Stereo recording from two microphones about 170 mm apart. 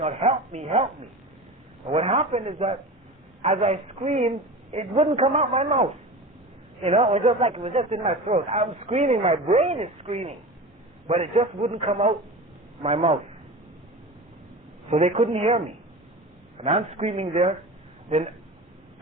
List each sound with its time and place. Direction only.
0.0 s speech: 40° right (ahead or behind)
1.9 s a man's voice: 35° right (ahead or behind)
14.8 s a man's voice: 40° right (ahead or behind)